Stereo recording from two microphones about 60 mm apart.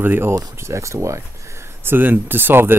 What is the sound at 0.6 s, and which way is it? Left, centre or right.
Speech, right.